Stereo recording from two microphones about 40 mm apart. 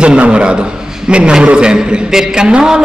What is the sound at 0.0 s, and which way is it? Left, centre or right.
A man's voice, right.